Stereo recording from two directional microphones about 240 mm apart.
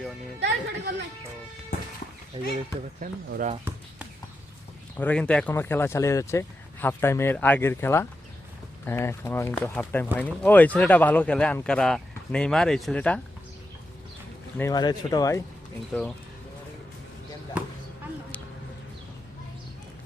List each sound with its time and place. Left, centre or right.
0.3 s speech: right
2.4 s speech: centre
3.0 s speech: right
4.9 s speech: centre
14.6 s speech: centre
17.6 s basketball bounce: centre